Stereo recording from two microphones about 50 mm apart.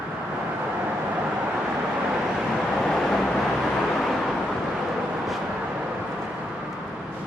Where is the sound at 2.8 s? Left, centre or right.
Centre.